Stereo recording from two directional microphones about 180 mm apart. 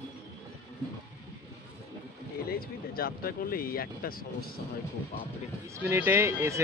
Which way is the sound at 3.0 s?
55° left (ahead or behind).